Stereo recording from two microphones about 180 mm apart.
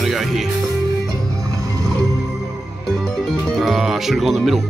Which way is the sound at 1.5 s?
20° right (ahead or behind).